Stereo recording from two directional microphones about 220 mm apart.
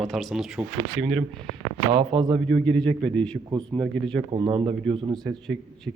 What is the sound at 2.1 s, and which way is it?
Speech, 20° right (ahead or behind).